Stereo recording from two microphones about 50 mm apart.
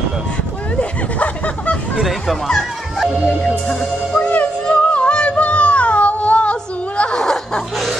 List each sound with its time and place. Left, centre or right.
0.7 s speech: left
2.0 s speech: centre
3.4 s music: centre
7.2 s snicker: centre